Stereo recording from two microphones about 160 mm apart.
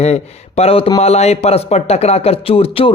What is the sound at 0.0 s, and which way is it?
A man's voice, 40° left (ahead or behind).